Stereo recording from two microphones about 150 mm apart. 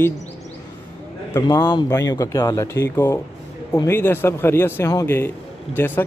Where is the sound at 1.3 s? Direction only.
25° left (ahead or behind).